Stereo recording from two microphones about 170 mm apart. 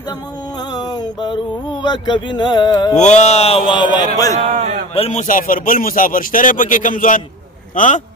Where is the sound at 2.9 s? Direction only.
40° left (ahead or behind); by 4.1 s 25° left (ahead or behind).